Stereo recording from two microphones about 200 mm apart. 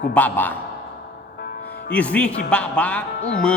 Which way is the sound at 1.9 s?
5° left (ahead or behind).